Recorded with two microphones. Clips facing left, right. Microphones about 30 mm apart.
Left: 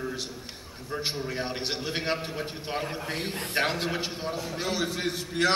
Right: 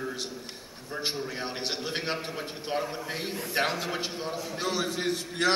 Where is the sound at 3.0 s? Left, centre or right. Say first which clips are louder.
Left 1 dB; left.